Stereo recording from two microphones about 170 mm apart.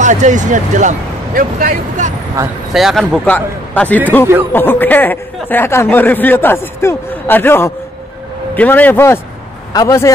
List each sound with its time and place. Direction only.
0.0 s speech: 45° right (ahead or behind)
2.7 s a man's voice: centre (ahead or behind); by 10.1 s 20° left (ahead or behind)